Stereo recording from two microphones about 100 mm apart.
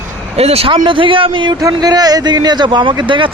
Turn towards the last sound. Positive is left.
turn(degrees=-55)  # may be behind; listen again after turning